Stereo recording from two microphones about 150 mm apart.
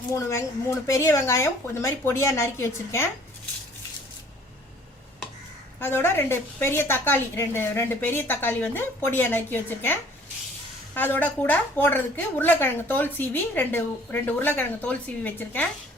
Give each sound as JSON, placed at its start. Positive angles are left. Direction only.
{"t": 0.1, "sound": "speech", "side_deg": 20}
{"t": 5.8, "sound": "a woman's voice", "side_deg": 15}